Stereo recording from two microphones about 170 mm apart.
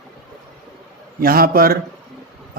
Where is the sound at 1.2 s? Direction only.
60° right (ahead or behind).